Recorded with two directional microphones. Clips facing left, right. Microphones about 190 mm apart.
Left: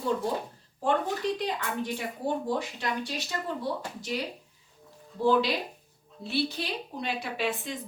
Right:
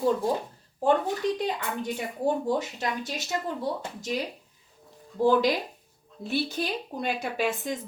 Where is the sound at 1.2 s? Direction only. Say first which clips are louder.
Right 4 dB; 45° right (ahead or behind).